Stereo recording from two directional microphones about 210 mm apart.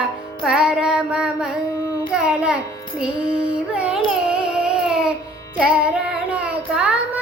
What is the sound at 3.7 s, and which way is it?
Carnatic music, 5° right (ahead or behind).